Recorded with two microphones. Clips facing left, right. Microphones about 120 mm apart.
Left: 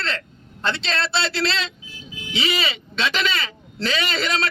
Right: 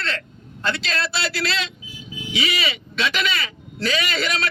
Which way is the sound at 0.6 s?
25° left (ahead or behind).